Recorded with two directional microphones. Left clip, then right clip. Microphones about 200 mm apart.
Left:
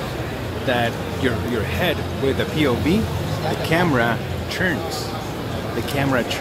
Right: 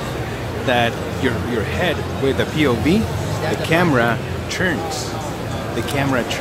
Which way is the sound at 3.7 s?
5° right (ahead or behind).